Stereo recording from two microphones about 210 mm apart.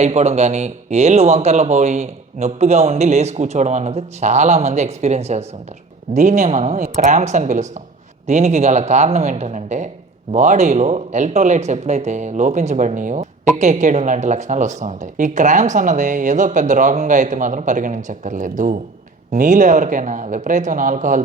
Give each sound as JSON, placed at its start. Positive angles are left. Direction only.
{"t": 0.0, "sound": "speech", "side_deg": -30}